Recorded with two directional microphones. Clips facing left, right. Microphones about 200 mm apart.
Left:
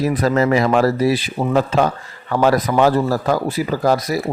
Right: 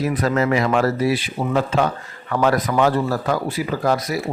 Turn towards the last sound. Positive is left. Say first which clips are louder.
# left 3 dB
turn(degrees=40)  # may be behind; listen again after turning